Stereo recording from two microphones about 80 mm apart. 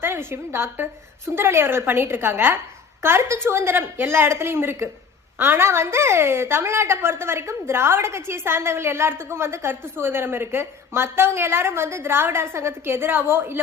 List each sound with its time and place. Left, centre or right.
0.0 s a woman's voice: right